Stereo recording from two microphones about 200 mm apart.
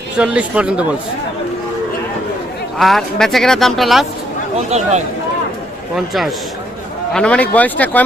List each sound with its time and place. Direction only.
0.2 s speech: 5° right (ahead or behind)
2.7 s speech: centre (ahead or behind)
4.7 s a man's voice: 35° right (ahead or behind)
7.1 s speech: 5° left (ahead or behind)